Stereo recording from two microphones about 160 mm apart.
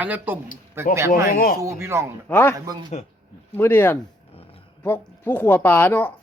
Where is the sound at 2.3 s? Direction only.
15° left (ahead or behind).